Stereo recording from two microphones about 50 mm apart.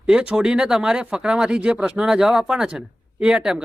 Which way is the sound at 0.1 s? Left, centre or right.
Centre.